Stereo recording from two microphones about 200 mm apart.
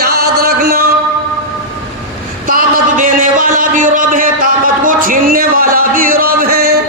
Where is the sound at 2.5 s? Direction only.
45° right (ahead or behind).